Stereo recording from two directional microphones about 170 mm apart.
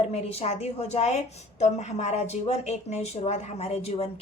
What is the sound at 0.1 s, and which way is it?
A woman's voice, 35° left (ahead or behind).